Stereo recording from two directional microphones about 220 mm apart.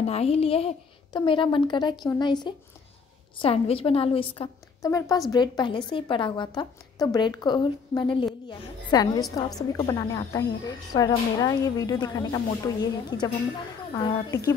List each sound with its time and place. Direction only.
0.0 s a woman's voice: 30° left (ahead or behind)
13.9 s a woman's voice: 15° left (ahead or behind)